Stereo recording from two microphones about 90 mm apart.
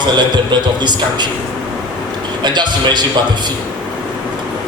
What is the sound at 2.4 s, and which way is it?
Speech, 55° right (ahead or behind).